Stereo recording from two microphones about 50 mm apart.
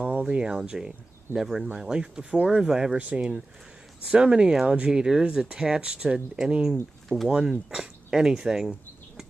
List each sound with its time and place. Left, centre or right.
0.0 s speech: right
3.0 s speech: right; by 9.2 s centre